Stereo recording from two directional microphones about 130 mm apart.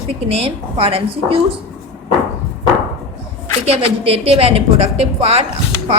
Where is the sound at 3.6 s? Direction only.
50° right (ahead or behind).